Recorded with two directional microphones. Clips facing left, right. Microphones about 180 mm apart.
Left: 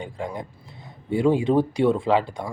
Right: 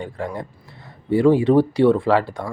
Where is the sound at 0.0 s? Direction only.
15° left (ahead or behind).